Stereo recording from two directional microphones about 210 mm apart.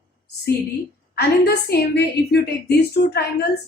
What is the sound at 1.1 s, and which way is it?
A woman's voice, 50° left (ahead or behind).